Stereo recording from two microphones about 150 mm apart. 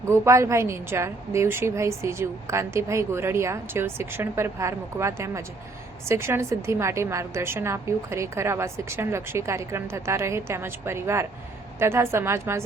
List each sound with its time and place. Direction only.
0.1 s a woman's voice: 20° right (ahead or behind)